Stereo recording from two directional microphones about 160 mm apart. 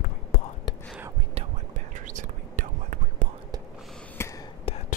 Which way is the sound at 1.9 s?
50° right (ahead or behind).